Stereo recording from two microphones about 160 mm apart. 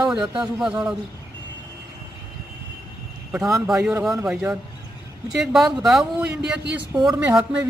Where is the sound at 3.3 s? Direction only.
10° right (ahead or behind).